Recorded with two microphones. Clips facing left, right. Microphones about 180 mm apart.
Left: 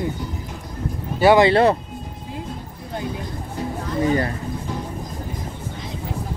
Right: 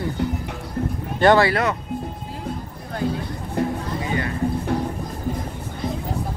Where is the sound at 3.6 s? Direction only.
60° right (ahead or behind).